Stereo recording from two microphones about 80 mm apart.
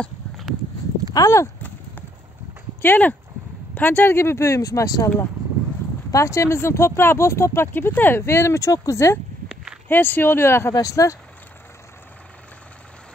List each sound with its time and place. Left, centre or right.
1.1 s speech: left
2.8 s speech: left
6.1 s speech: left
9.8 s speech: left
10.7 s speech: left